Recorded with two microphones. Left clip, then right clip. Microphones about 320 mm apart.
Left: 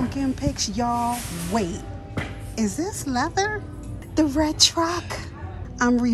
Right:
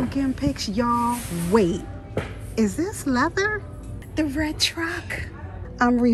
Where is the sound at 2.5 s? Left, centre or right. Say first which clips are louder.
Right 3 dB; centre.